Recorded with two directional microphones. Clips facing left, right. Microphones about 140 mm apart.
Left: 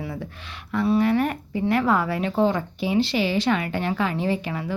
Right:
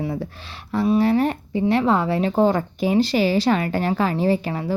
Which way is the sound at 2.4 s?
45° right (ahead or behind).